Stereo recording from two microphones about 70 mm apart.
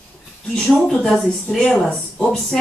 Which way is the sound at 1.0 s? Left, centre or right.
Centre.